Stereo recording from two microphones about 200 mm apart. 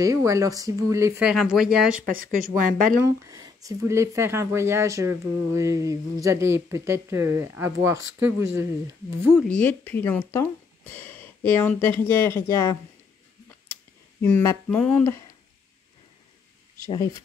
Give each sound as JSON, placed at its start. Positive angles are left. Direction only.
{"t": 0.0, "sound": "speech", "side_deg": -15}
{"t": 1.2, "sound": "speech", "side_deg": 0}
{"t": 2.0, "sound": "speech", "side_deg": -45}
{"t": 3.3, "sound": "speech", "side_deg": -20}
{"t": 9.4, "sound": "speech", "side_deg": 5}
{"t": 14.2, "sound": "speech", "side_deg": 10}
{"t": 16.8, "sound": "speech", "side_deg": 20}